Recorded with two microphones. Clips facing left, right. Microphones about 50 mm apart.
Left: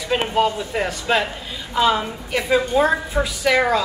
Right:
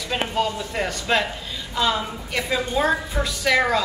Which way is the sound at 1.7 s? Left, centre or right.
Centre.